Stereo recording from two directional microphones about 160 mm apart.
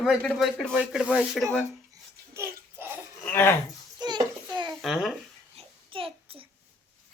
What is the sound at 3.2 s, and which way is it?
Laughter, 15° left (ahead or behind).